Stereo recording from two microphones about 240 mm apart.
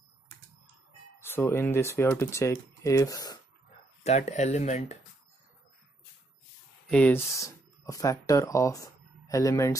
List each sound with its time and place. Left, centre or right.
1.2 s speech: centre
4.0 s speech: left
6.9 s speech: centre